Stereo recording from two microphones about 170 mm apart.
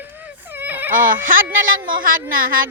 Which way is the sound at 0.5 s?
10° right (ahead or behind).